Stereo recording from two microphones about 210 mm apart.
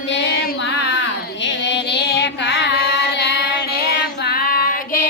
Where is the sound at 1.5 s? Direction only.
55° left (ahead or behind).